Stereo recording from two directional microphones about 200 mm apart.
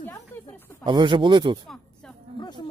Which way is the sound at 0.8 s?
25° right (ahead or behind).